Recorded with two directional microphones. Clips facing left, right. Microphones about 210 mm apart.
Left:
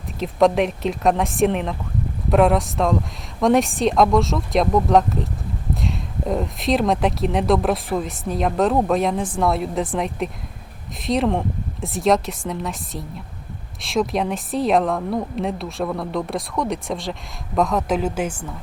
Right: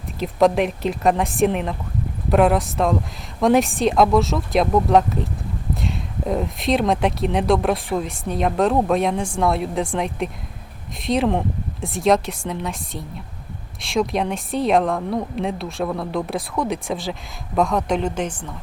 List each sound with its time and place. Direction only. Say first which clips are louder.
0.2 s a woman's voice: even; centre (ahead or behind)